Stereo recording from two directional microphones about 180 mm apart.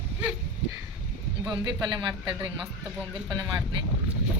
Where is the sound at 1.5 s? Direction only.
25° right (ahead or behind).